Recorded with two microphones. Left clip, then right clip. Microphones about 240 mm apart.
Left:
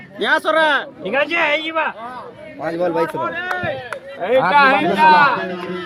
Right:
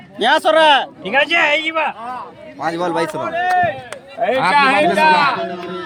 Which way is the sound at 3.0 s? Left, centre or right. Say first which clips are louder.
Right 3 dB; right.